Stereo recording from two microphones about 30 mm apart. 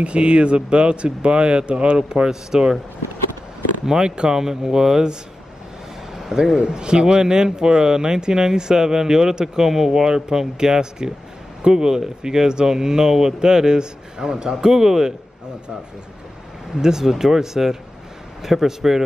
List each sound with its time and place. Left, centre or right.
0.0 s speech: right
2.0 s speech: right
4.3 s speech: centre
6.1 s a sound: centre
6.5 s speech: right
16.7 s speech: centre